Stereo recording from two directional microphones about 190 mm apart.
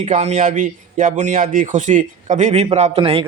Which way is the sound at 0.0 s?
35° right (ahead or behind).